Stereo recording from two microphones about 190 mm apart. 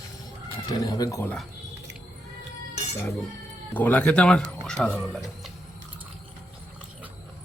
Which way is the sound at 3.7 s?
10° left (ahead or behind).